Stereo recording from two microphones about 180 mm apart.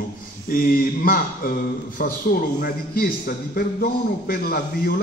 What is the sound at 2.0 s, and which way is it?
A man's voice, 55° left (ahead or behind).